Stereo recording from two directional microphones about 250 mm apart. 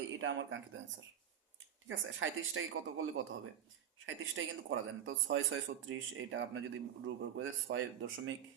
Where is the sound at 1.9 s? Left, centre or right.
Right.